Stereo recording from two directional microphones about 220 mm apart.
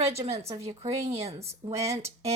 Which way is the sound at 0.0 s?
30° right (ahead or behind).